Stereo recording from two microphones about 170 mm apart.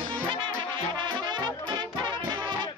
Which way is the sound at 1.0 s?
25° right (ahead or behind).